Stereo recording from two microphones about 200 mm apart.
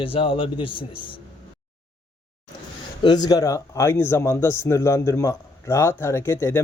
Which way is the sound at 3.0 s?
20° left (ahead or behind).